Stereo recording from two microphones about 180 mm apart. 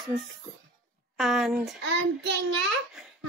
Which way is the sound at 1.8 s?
80° right.